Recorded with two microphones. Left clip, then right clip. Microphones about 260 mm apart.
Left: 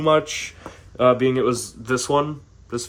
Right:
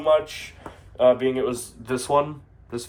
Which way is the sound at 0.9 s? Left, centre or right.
Left.